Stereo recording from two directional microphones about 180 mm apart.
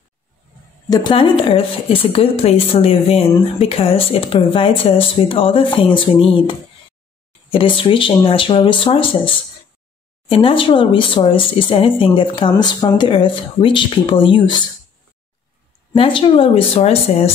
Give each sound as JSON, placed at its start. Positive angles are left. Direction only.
{"t": 0.8, "sound": "a woman's voice", "side_deg": 20}
{"t": 15.9, "sound": "a woman's voice", "side_deg": 30}